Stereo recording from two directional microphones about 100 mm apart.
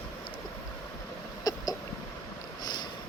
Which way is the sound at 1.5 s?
40° left (ahead or behind).